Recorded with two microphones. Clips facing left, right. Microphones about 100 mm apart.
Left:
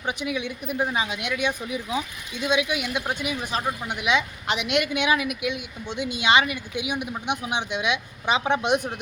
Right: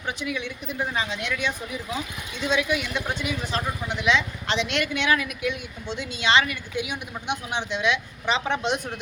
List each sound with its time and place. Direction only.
0.0 s speech: 15° left (ahead or behind)